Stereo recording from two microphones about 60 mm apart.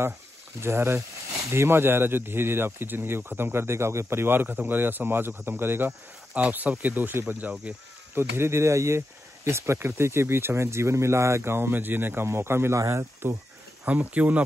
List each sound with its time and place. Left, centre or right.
0.6 s speech: right
6.3 s speech: right
8.2 s speech: right
12.3 s speech: right
13.2 s speech: right
13.8 s speech: right